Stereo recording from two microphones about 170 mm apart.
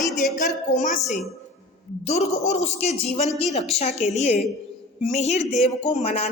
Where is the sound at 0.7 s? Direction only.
45° left (ahead or behind).